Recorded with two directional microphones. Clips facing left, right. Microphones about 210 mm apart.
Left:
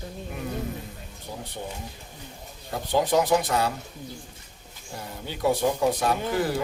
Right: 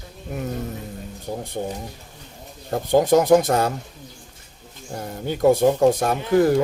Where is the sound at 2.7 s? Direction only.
45° right (ahead or behind).